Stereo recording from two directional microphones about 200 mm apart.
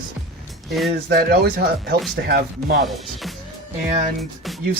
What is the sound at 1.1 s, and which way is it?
Speech, 50° right (ahead or behind).